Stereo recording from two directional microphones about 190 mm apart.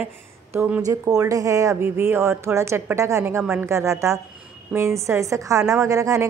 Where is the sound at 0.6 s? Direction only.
10° right (ahead or behind).